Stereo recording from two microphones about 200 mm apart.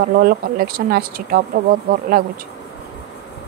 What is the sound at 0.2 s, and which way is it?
Speech, 45° right (ahead or behind).